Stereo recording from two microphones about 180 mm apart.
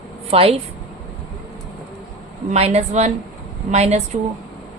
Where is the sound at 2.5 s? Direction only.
35° right (ahead or behind).